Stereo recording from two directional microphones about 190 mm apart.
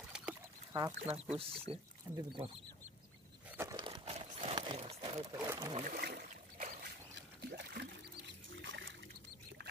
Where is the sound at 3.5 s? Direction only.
20° right (ahead or behind).